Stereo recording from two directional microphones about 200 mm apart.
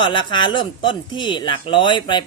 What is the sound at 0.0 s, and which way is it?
Speech, 25° left (ahead or behind).